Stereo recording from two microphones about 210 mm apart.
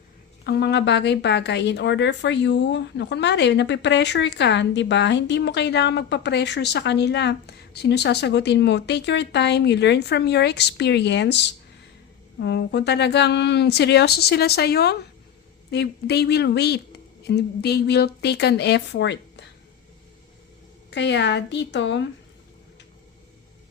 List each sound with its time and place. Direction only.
0.4 s a woman's voice: 50° left (ahead or behind)
20.9 s a woman's voice: 55° left (ahead or behind)